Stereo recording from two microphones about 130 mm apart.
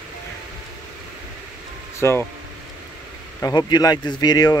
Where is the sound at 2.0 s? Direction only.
20° left (ahead or behind).